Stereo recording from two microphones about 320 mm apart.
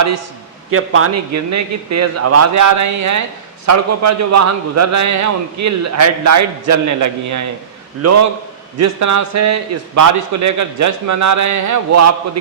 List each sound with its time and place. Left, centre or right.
0.7 s a man's voice: right
8.0 s a man's voice: right
8.8 s a man's voice: right